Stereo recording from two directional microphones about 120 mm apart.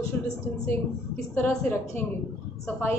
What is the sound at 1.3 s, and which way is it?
Speech, 20° left (ahead or behind).